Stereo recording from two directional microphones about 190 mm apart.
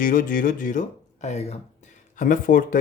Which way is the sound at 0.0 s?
45° left (ahead or behind).